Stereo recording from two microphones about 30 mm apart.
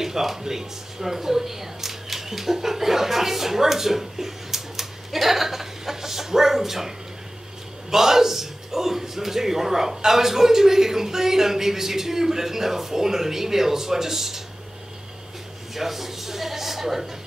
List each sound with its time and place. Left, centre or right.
0.0 s speech: centre
7.9 s a man's voice: centre
15.7 s a man's voice: centre